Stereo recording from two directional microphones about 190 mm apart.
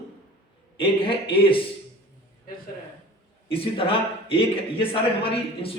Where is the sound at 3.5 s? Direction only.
30° left (ahead or behind).